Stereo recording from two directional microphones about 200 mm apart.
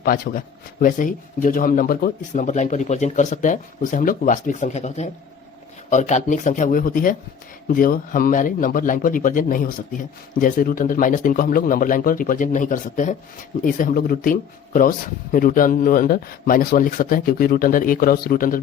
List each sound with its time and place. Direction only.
0.0 s speech: 45° left (ahead or behind)